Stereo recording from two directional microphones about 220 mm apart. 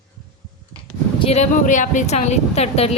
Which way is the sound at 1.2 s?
30° left (ahead or behind).